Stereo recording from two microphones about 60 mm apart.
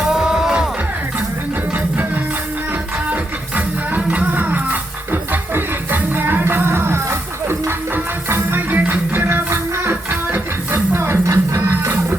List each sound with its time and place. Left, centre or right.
0.1 s music: centre
3.1 s music: right
8.7 s music: right
11.3 s music: right